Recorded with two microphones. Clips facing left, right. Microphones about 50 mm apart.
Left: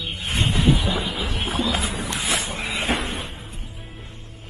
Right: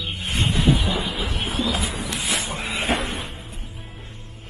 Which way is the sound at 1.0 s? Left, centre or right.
Right.